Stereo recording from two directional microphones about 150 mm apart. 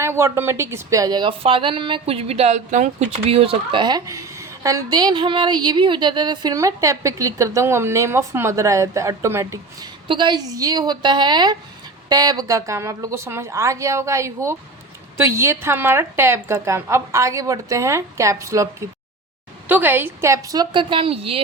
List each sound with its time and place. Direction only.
0.0 s speech: 20° right (ahead or behind)
10.1 s speech: 30° right (ahead or behind)